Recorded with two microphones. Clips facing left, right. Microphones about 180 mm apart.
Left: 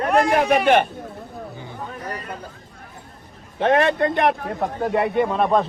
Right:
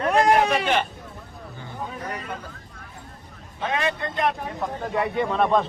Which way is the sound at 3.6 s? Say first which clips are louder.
Left 9 dB; 60° left (ahead or behind).